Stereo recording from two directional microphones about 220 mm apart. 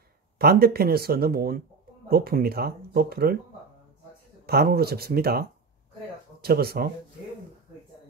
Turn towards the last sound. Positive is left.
turn(degrees=-45)  # may be behind; listen again after turning